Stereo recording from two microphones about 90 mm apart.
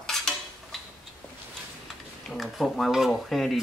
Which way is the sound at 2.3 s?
Centre (ahead or behind).